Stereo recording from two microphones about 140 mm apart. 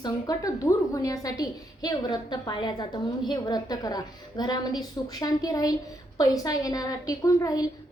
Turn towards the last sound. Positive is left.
turn(degrees=25)  # may be behind; listen again after turning